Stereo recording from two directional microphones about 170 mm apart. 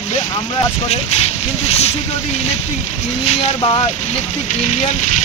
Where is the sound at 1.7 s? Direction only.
40° left (ahead or behind).